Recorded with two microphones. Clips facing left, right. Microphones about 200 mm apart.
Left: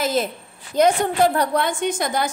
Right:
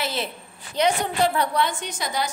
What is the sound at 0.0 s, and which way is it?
A woman's voice, 45° left (ahead or behind).